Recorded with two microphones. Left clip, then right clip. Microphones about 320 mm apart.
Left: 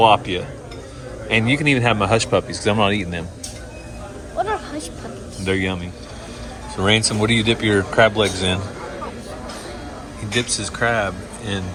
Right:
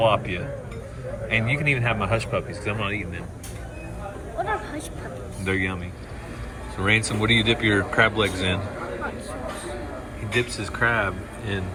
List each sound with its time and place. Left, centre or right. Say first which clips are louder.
0.0 s speech: left 7 dB; centre
5.5 s speech: left 4 dB; centre
6.8 s speech: left 4 dB; centre
10.3 s speech: left 3 dB; centre